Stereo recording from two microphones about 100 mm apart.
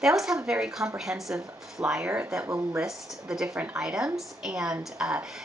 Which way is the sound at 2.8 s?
5° right (ahead or behind).